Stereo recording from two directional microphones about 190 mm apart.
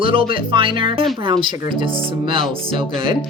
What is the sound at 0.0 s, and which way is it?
Speech, 30° right (ahead or behind).